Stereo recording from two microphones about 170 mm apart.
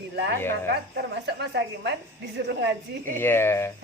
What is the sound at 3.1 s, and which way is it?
Speech, 15° left (ahead or behind).